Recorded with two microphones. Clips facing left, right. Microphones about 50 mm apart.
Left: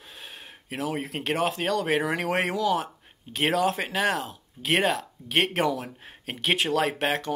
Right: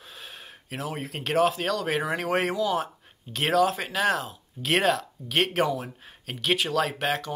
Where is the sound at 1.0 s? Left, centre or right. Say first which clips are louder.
Right 7 dB; centre.